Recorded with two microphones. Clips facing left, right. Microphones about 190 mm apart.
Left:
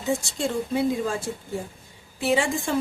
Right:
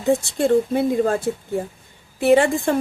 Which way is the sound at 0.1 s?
60° right (ahead or behind).